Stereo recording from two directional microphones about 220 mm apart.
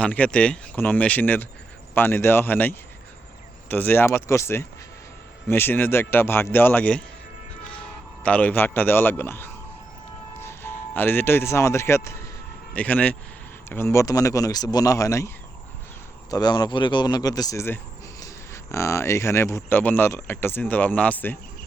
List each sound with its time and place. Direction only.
0.0 s a man's voice: 5° left (ahead or behind)
16.3 s speech: 20° left (ahead or behind)